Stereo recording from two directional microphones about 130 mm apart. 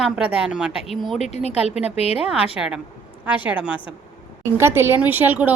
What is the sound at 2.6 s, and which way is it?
A woman's voice, 15° right (ahead or behind).